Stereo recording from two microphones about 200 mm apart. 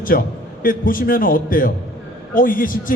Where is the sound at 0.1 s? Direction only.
45° left (ahead or behind).